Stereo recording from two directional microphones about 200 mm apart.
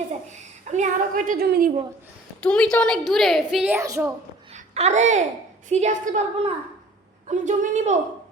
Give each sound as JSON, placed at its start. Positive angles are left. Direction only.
{"t": 0.3, "sound": "a woman's voice", "side_deg": -35}
{"t": 2.4, "sound": "a woman's voice", "side_deg": 5}
{"t": 4.5, "sound": "a child's voice", "side_deg": -35}